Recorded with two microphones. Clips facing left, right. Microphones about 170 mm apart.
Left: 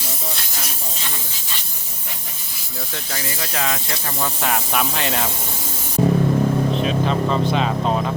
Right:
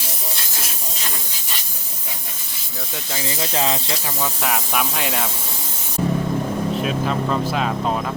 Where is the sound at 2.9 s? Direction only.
20° right (ahead or behind).